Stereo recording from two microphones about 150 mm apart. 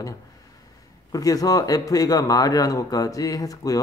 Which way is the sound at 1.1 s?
25° left (ahead or behind).